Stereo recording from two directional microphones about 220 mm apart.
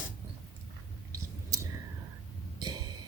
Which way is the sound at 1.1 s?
15° right (ahead or behind).